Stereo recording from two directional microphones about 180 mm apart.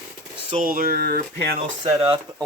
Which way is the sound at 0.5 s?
50° right (ahead or behind).